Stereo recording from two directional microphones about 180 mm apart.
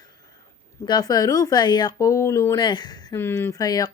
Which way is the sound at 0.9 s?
20° left (ahead or behind).